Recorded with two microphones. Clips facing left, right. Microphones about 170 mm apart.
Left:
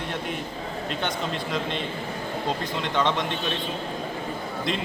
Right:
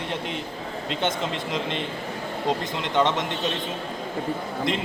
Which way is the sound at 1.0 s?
20° right (ahead or behind).